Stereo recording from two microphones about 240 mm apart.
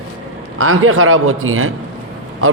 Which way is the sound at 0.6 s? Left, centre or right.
Right.